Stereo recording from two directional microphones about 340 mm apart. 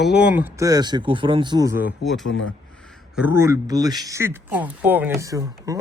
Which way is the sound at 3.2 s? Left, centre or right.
Centre.